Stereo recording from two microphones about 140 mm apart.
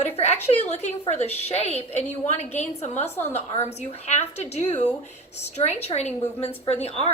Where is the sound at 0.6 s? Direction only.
50° left (ahead or behind).